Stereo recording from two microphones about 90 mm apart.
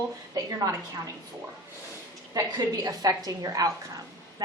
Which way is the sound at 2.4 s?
45° right (ahead or behind).